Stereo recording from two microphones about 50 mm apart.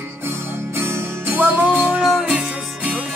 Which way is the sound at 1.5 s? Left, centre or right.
Right.